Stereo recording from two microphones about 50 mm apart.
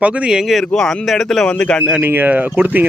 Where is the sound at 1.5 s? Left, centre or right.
Left.